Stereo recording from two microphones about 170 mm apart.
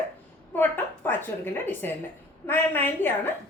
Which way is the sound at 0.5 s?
10° left (ahead or behind).